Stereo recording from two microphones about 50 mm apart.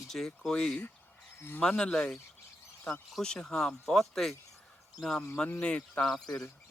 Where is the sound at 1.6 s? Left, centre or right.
Centre.